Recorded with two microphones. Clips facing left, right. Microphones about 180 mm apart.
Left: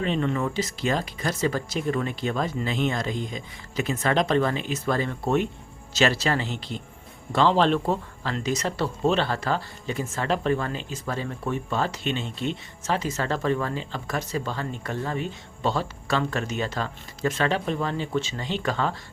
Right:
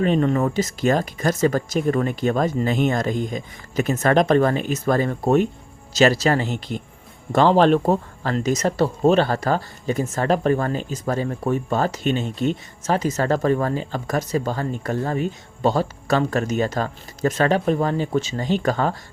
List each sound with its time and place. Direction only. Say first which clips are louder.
0.0 s speech: right 6 dB; 45° right (ahead or behind)